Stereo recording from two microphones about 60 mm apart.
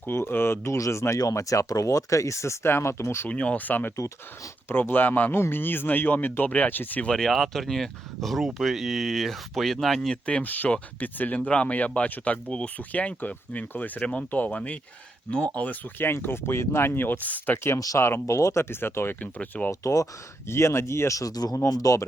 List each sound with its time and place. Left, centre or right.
0.3 s speech: left
1.3 s speech: left
3.2 s speech: left
7.0 s speech: centre
10.2 s speech: left
17.7 s speech: left
18.0 s speech: left
19.4 s speech: left
19.8 s speech: left
20.5 s speech: left
21.2 s speech: left